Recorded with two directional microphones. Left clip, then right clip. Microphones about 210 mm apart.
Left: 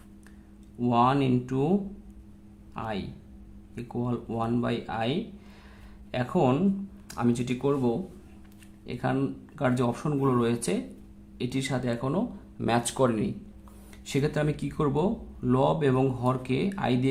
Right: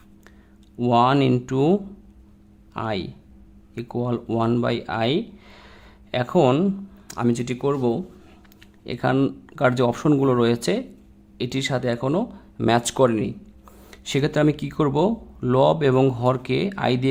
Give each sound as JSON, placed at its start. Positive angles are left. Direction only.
{"t": 0.8, "sound": "speech", "side_deg": -35}